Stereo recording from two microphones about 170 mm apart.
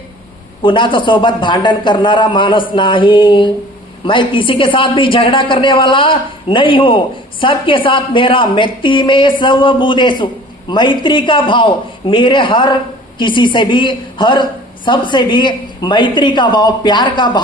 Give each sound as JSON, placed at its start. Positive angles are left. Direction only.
{"t": 0.6, "sound": "a man's voice", "side_deg": 30}